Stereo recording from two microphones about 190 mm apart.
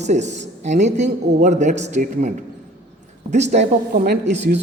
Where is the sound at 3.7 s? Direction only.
55° right (ahead or behind).